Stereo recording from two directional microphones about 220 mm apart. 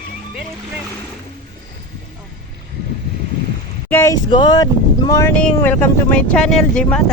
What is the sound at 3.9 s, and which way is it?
Speech, 15° left (ahead or behind).